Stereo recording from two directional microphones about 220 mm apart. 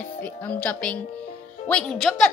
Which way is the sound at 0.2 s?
5° left (ahead or behind).